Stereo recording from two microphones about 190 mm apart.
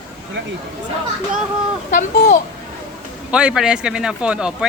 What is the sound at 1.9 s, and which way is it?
Speech, 45° left (ahead or behind).